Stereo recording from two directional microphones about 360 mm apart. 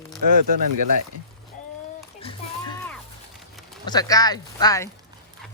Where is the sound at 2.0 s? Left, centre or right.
Centre.